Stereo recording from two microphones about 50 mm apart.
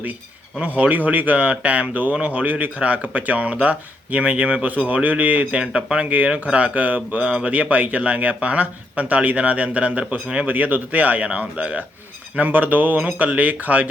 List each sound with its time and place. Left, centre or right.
0.8 s speech: right
12.4 s speech: right